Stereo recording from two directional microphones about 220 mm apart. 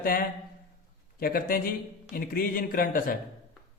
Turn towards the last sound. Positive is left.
turn(degrees=40)  # may be behind; listen again after turning